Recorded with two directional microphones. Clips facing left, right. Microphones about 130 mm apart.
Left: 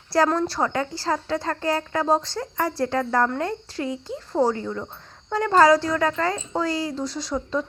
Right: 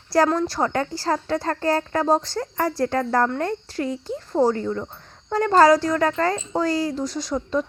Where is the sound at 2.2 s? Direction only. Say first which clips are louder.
Right 2 dB; 25° left (ahead or behind).